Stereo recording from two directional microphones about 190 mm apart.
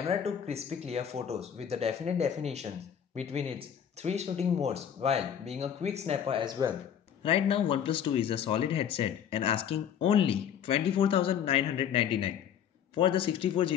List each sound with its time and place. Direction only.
0.1 s speech: 35° right (ahead or behind)
7.2 s speech: 30° left (ahead or behind)